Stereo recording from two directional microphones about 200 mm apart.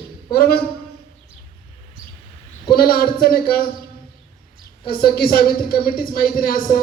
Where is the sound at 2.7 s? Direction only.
50° left (ahead or behind).